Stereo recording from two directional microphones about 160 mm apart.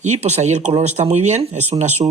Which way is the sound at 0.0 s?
40° right (ahead or behind).